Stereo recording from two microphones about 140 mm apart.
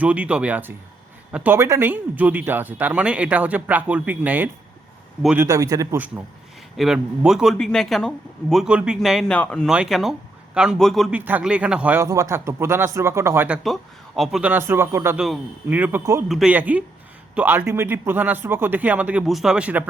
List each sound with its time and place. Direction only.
0.0 s speech: 10° right (ahead or behind)
5.4 s speech: 25° right (ahead or behind)
6.7 s speech: 5° right (ahead or behind)
9.6 s speech: 5° right (ahead or behind)
11.1 s speech: 10° right (ahead or behind)
12.0 s speech: 20° right (ahead or behind)